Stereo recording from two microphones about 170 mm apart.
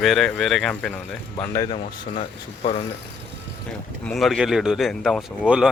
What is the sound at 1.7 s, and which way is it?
Speech, 35° left (ahead or behind).